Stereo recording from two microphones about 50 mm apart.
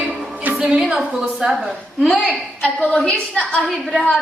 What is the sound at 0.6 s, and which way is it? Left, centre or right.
A woman's voice, centre.